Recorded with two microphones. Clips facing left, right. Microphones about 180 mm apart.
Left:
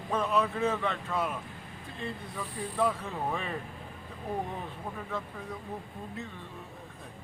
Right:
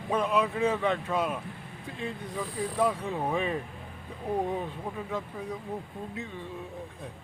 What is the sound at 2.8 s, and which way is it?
Speech, 15° right (ahead or behind).